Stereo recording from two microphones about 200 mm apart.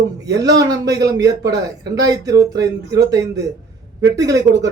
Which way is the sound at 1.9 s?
15° right (ahead or behind).